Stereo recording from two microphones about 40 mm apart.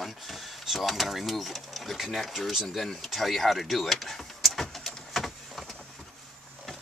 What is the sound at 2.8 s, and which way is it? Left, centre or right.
Vehicle, centre.